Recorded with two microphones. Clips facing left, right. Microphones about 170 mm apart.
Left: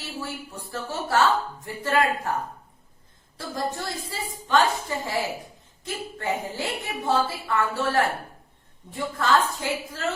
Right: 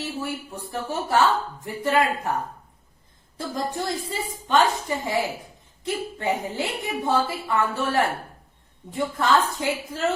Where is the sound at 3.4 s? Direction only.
20° right (ahead or behind).